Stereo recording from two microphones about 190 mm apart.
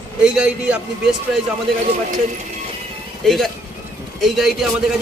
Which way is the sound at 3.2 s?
Centre (ahead or behind).